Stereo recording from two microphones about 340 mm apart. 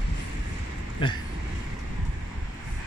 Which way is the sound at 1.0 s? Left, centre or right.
Centre.